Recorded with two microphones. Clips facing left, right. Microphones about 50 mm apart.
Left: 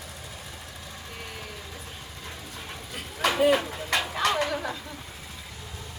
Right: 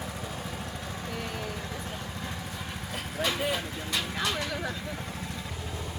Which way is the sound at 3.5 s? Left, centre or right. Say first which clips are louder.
Left 6 dB; left.